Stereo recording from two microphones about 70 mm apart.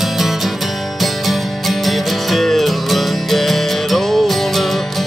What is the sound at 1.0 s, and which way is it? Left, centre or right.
Music, centre.